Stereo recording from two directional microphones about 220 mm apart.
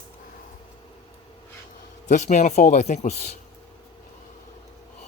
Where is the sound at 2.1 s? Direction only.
35° left (ahead or behind).